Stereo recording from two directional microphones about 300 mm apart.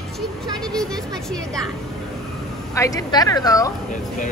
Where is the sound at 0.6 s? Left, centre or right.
Centre.